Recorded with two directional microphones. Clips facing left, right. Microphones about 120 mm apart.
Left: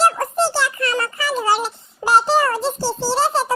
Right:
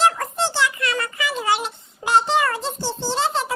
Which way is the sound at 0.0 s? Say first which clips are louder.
Left 3 dB; 40° left (ahead or behind).